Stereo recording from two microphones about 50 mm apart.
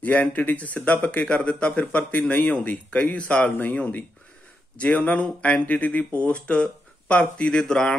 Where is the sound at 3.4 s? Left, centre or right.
Left.